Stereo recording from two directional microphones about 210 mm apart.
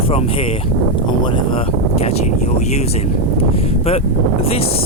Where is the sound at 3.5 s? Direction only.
30° left (ahead or behind).